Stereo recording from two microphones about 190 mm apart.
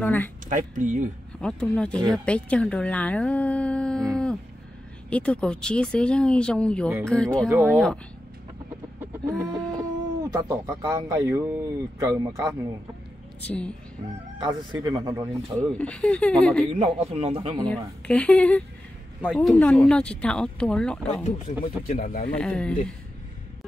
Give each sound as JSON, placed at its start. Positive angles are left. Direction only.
{"t": 0.0, "sound": "speech", "side_deg": 10}
{"t": 0.5, "sound": "speech", "side_deg": -40}
{"t": 1.4, "sound": "speech", "side_deg": 5}
{"t": 9.3, "sound": "chicken", "side_deg": 5}
{"t": 10.3, "sound": "speech", "side_deg": -20}
{"t": 13.4, "sound": "speech", "side_deg": 5}
{"t": 14.4, "sound": "speech", "side_deg": -20}
{"t": 15.5, "sound": "speech", "side_deg": 5}
{"t": 16.7, "sound": "speech", "side_deg": -35}
{"t": 17.6, "sound": "speech", "side_deg": 5}
{"t": 21.5, "sound": "speech", "side_deg": 50}
{"t": 22.3, "sound": "speech", "side_deg": 5}